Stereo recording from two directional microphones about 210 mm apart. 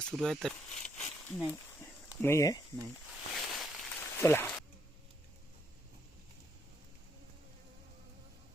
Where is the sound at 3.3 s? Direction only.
Centre (ahead or behind).